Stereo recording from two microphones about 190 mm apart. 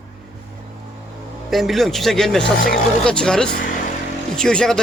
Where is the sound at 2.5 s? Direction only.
50° left (ahead or behind).